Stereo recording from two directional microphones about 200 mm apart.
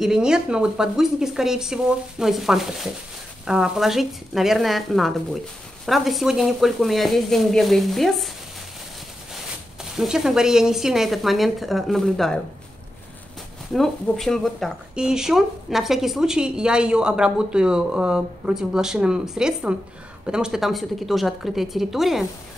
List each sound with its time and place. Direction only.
0.0 s speech: 5° right (ahead or behind)
9.9 s speech: centre (ahead or behind)
13.7 s speech: centre (ahead or behind)